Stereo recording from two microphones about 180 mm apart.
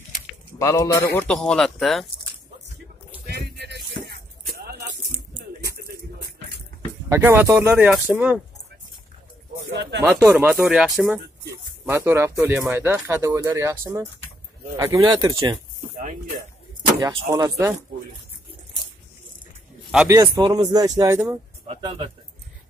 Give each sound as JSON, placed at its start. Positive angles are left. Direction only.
{"t": 0.6, "sound": "a man's voice", "side_deg": 15}
{"t": 3.3, "sound": "music", "side_deg": -70}
{"t": 5.6, "sound": "a sound", "side_deg": -60}
{"t": 7.1, "sound": "speech", "side_deg": -10}
{"t": 9.7, "sound": "speech", "side_deg": -70}
{"t": 10.0, "sound": "speech", "side_deg": -10}
{"t": 11.8, "sound": "speech", "side_deg": -15}
{"t": 17.3, "sound": "speech", "side_deg": -15}
{"t": 19.9, "sound": "a man's voice", "side_deg": -5}
{"t": 20.3, "sound": "speech", "side_deg": -25}
{"t": 21.6, "sound": "speech", "side_deg": -30}